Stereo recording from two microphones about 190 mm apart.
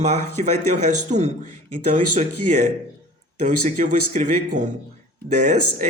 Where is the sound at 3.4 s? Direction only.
40° right (ahead or behind).